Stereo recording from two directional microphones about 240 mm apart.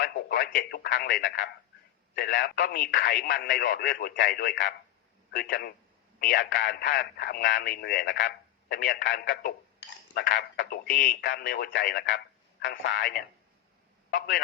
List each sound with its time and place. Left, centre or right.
0.0 s speech: left